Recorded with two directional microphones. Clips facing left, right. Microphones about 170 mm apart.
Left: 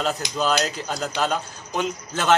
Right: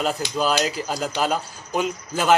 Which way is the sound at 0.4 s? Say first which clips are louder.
Right 1 dB; 5° right (ahead or behind).